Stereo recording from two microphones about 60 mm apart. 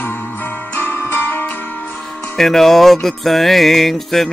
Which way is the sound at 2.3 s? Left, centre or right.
Centre.